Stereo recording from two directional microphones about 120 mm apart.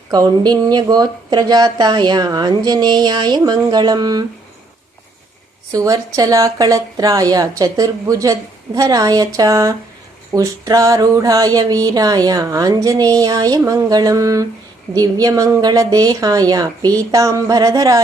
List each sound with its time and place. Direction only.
0.1 s speech: 35° right (ahead or behind)
5.7 s speech: 30° right (ahead or behind)
10.3 s a sound: 30° right (ahead or behind)
14.9 s speech: 30° right (ahead or behind)